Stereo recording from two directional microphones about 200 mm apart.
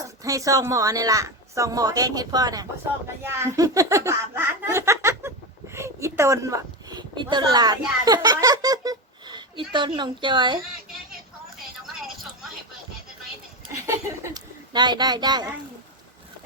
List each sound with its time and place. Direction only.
0.0 s speech: 15° right (ahead or behind)
3.2 s laughter: 15° right (ahead or behind)
6.9 s a child's voice: 20° right (ahead or behind)
14.3 s speech: 20° right (ahead or behind)